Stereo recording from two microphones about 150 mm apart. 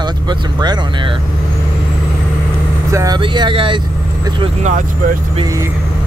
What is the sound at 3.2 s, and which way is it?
Speech, 35° right (ahead or behind).